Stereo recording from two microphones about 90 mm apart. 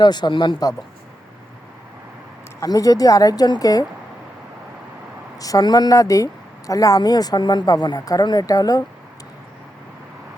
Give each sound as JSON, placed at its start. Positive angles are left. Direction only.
{"t": 0.0, "sound": "speech", "side_deg": 55}
{"t": 2.6, "sound": "speech", "side_deg": 40}
{"t": 5.4, "sound": "speech", "side_deg": 45}